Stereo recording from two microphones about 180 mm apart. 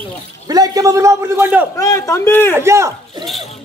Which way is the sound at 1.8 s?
20° left (ahead or behind).